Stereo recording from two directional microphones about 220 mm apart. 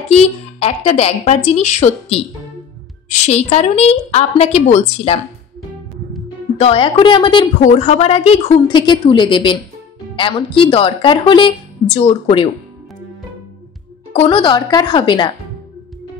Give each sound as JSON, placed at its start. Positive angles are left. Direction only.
{"t": 0.1, "sound": "speech", "side_deg": 30}
{"t": 6.6, "sound": "speech", "side_deg": 25}
{"t": 14.1, "sound": "speech", "side_deg": 25}